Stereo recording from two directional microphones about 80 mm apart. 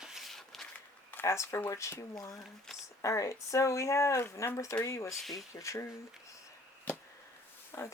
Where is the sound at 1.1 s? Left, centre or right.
Left.